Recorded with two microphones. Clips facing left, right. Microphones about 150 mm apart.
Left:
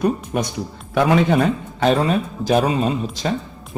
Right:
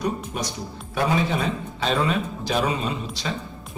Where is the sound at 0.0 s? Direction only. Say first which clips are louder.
Left 7 dB; 55° left (ahead or behind).